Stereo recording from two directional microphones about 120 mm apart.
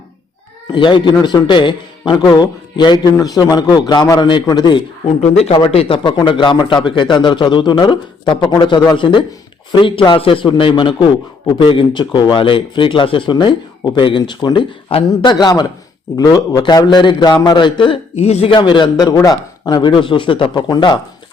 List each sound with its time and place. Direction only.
0.7 s a man's voice: 40° left (ahead or behind)
5.2 s a man's voice: 60° left (ahead or behind)
6.0 s a man's voice: 40° left (ahead or behind)
17.8 s a man's voice: 55° left (ahead or behind)
18.5 s a man's voice: 40° left (ahead or behind)